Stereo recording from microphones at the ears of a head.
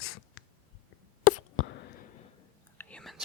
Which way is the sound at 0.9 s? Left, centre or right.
Left.